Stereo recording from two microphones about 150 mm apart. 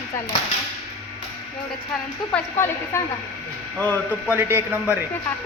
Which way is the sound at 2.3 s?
15° left (ahead or behind).